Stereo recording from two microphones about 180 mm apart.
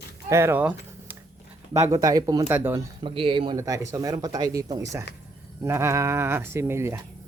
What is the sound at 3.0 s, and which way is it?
Speech, 30° right (ahead or behind).